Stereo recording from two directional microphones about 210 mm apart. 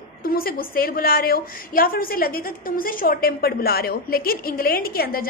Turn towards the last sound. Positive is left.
turn(degrees=45)  # may be behind; listen again after turning